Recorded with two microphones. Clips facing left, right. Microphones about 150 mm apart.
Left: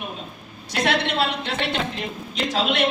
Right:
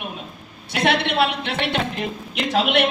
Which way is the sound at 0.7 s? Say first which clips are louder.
Right 2 dB; 60° right (ahead or behind).